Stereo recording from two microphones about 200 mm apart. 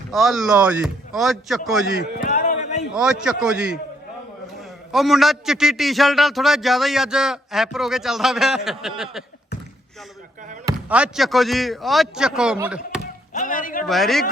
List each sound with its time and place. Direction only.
0.1 s a man's voice: centre (ahead or behind)
2.1 s a sound: 40° left (ahead or behind)
2.9 s a man's voice: 5° right (ahead or behind)
4.9 s a man's voice: centre (ahead or behind)
10.8 s a man's voice: 5° right (ahead or behind)
13.3 s a man's voice: 40° left (ahead or behind)
13.8 s a man's voice: centre (ahead or behind)